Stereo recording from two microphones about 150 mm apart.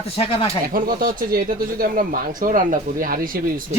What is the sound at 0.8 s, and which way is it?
Speech, 75° right (ahead or behind).